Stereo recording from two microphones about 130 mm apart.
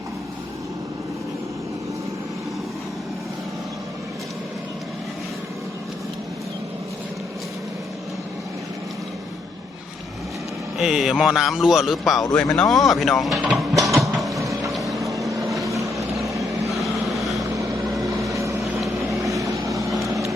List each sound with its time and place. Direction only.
10.8 s speech: centre (ahead or behind)
14.2 s printer: centre (ahead or behind)
14.7 s vehicle: centre (ahead or behind)
15.3 s vehicle: 25° right (ahead or behind)
15.6 s boat: 25° right (ahead or behind)
16.0 s vehicle: centre (ahead or behind)
16.3 s vehicle: 25° right (ahead or behind)
16.7 s vehicle: centre (ahead or behind)
17.4 s vehicle: 25° right (ahead or behind)
18.9 s vehicle: centre (ahead or behind)
19.2 s vehicle: 25° right (ahead or behind)